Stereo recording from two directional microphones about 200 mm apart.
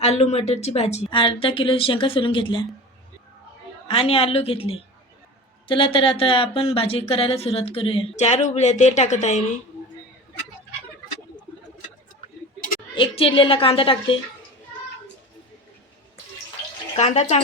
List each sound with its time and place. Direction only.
0.0 s speech: 35° left (ahead or behind)
3.8 s speech: 25° left (ahead or behind)
13.0 s speech: 25° left (ahead or behind)
17.0 s speech: 30° left (ahead or behind)